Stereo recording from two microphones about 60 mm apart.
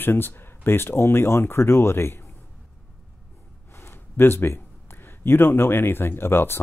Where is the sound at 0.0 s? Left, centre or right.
Left.